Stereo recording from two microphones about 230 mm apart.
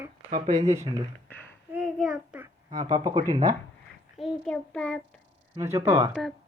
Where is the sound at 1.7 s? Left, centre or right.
Centre.